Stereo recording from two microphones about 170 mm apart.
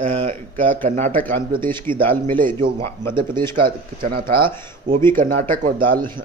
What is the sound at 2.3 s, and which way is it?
Speech, 55° right (ahead or behind).